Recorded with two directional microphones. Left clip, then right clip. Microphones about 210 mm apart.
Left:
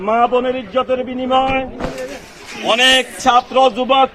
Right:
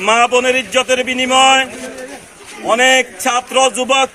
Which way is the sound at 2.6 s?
10° left (ahead or behind).